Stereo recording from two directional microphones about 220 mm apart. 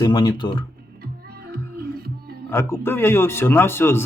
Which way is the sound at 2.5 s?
10° left (ahead or behind).